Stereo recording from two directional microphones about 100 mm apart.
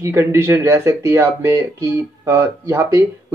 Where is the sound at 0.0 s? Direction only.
25° right (ahead or behind).